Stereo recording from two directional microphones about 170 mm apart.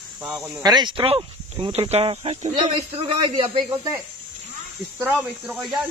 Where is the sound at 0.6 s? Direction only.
25° right (ahead or behind).